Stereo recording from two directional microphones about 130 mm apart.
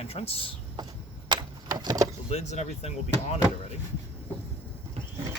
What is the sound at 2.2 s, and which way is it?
Speech, 55° left (ahead or behind).